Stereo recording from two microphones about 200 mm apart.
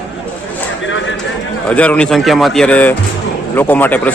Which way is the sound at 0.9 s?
70° left (ahead or behind).